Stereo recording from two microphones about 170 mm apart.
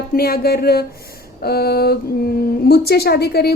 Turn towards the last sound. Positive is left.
turn(degrees=65)  # may be behind; listen again after turning